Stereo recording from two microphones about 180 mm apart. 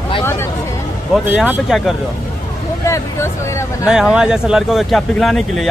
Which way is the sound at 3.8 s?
5° right (ahead or behind).